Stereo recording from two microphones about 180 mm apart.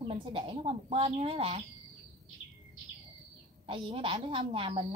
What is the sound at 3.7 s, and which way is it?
A woman's voice, 30° right (ahead or behind).